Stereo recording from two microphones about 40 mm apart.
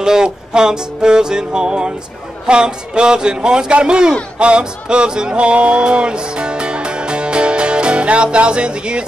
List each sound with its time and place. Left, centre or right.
0.0 s music: centre